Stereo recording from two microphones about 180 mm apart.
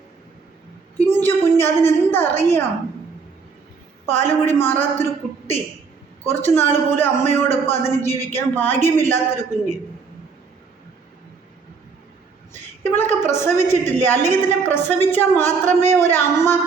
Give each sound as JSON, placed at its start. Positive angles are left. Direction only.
{"t": 0.9, "sound": "a woman's voice", "side_deg": 10}
{"t": 4.0, "sound": "a man's voice", "side_deg": 10}
{"t": 6.2, "sound": "a man's voice", "side_deg": 10}
{"t": 12.8, "sound": "a man's voice", "side_deg": 10}
{"t": 15.4, "sound": "speech", "side_deg": -40}
{"t": 15.9, "sound": "a man's voice", "side_deg": 15}